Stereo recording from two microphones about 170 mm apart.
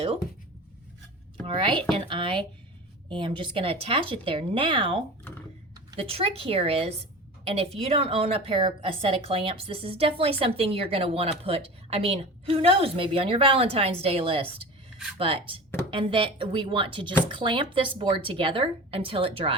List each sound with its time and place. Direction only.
1.5 s a woman's voice: 30° right (ahead or behind)
6.0 s a woman's voice: 35° right (ahead or behind)